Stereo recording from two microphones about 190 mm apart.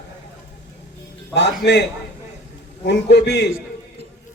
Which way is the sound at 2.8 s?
65° left (ahead or behind).